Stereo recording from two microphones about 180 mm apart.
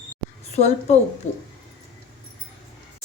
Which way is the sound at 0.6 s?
40° left (ahead or behind).